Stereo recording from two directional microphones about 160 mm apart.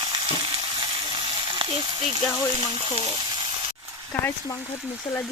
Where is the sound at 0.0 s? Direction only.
30° right (ahead or behind).